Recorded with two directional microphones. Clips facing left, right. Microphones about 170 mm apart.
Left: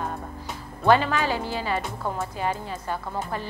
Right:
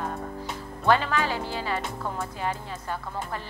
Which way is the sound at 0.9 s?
15° left (ahead or behind).